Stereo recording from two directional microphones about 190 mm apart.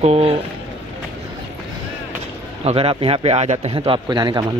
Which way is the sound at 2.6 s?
30° right (ahead or behind).